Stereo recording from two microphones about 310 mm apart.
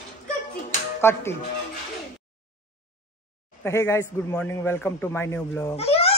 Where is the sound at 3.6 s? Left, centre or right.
Centre.